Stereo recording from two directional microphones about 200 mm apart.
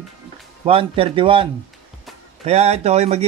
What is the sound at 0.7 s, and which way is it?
Speech, 30° right (ahead or behind).